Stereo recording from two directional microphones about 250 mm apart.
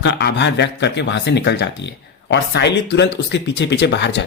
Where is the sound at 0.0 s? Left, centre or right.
Left.